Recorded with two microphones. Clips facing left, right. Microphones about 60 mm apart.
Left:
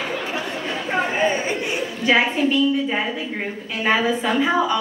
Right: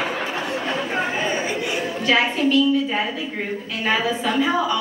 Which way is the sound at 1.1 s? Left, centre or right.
Left.